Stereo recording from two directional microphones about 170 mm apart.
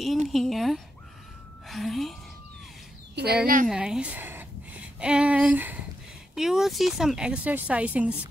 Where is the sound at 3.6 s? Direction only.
5° right (ahead or behind).